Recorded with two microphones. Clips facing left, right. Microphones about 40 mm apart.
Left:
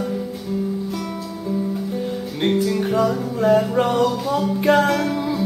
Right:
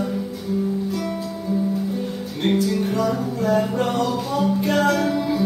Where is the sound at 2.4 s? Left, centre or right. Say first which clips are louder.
Left 1 dB; centre.